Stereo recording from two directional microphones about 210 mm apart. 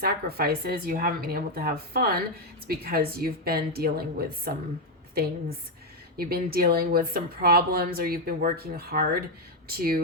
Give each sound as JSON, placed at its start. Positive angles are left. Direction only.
{"t": 0.0, "sound": "speech", "side_deg": -45}
{"t": 6.1, "sound": "speech", "side_deg": -45}